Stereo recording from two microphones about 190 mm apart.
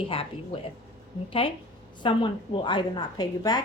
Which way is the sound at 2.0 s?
25° left (ahead or behind).